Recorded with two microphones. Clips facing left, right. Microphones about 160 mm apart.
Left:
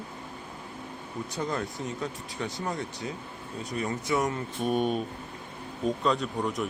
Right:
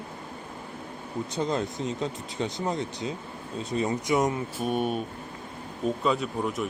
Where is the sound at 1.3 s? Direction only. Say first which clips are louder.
Right 4 dB; 20° right (ahead or behind).